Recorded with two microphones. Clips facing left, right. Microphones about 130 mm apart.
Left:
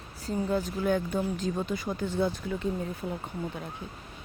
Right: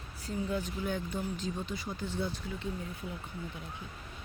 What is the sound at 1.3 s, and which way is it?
Speech, 50° left (ahead or behind).